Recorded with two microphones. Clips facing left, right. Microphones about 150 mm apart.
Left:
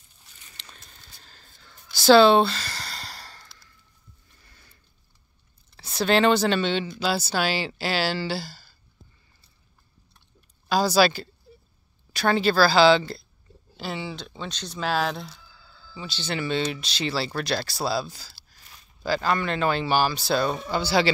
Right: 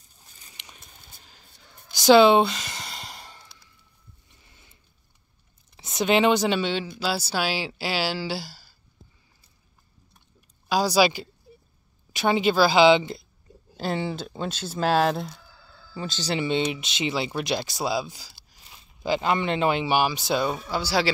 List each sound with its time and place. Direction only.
0.5 s a sound: 15° right (ahead or behind)
5.8 s speech: 20° right (ahead or behind)
10.7 s speech: 10° right (ahead or behind)
11.5 s a sound: 10° right (ahead or behind)
12.1 s speech: 15° right (ahead or behind)
14.1 s speech: 5° right (ahead or behind)
15.9 s speech: 45° right (ahead or behind)
16.3 s speech: 20° right (ahead or behind)